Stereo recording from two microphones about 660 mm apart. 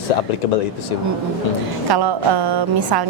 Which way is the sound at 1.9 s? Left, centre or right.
Right.